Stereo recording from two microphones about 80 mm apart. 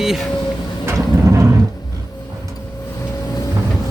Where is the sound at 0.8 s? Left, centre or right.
Right.